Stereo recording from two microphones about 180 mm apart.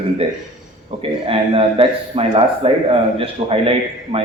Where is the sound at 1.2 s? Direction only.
30° right (ahead or behind).